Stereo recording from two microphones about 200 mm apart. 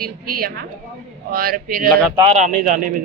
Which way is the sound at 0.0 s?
45° right (ahead or behind).